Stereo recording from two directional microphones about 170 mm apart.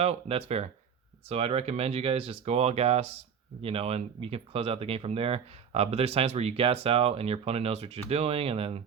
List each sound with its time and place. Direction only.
0.0 s speech: 35° right (ahead or behind)